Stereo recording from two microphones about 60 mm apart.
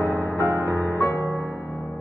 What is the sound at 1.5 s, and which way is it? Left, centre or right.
Music, left.